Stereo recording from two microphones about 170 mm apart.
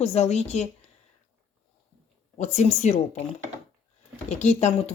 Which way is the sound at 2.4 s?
45° left (ahead or behind).